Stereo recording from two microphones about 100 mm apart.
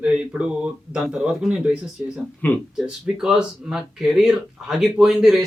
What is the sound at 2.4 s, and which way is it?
Speech, 15° left (ahead or behind).